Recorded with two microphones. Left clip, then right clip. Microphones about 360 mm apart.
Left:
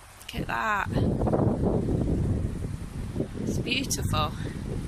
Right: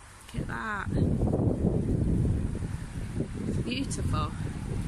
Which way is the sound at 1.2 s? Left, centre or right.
Left.